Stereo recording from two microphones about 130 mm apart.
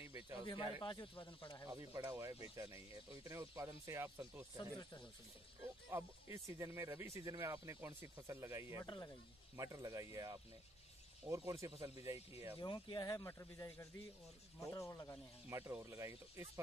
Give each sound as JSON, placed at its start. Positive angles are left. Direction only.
{"t": 0.0, "sound": "a sound", "side_deg": -30}
{"t": 0.5, "sound": "speech", "side_deg": 40}
{"t": 1.7, "sound": "speech", "side_deg": -25}
{"t": 5.9, "sound": "speech", "side_deg": -20}
{"t": 8.7, "sound": "speech", "side_deg": 35}
{"t": 9.6, "sound": "speech", "side_deg": -25}
{"t": 12.5, "sound": "speech", "side_deg": 35}
{"t": 15.5, "sound": "speech", "side_deg": -20}